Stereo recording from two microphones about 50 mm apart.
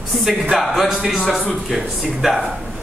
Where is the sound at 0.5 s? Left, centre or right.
Centre.